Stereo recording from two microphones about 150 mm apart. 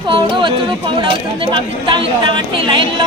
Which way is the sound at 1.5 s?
35° right (ahead or behind).